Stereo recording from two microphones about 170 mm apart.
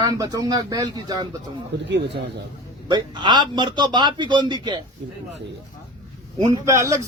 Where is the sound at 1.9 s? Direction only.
90° right.